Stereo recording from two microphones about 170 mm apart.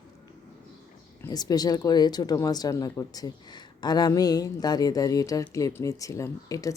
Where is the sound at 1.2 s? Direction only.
20° left (ahead or behind).